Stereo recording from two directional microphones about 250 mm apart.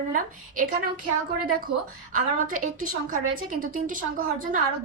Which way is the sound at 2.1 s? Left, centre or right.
Right.